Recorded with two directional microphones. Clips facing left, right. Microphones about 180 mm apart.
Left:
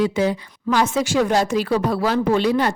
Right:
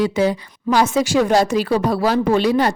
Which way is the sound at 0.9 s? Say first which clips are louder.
Right 3 dB; 35° right (ahead or behind).